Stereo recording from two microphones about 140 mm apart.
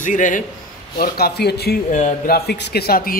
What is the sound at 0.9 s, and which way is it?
A man's voice, 90° left.